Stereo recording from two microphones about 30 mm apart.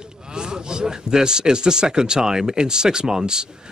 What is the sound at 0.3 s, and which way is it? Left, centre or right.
A man's voice, right.